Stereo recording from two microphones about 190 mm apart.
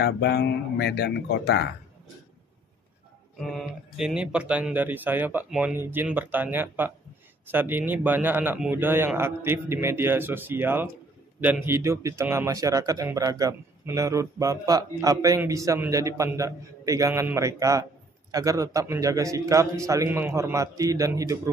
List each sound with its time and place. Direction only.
0.0 s speech: 60° left (ahead or behind)
3.3 s speech: centre (ahead or behind); by 21.4 s 15° right (ahead or behind)